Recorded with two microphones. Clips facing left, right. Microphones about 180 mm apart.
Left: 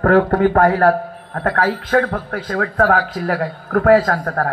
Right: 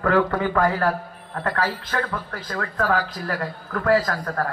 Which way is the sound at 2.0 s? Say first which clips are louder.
Left 9 dB; 65° left (ahead or behind).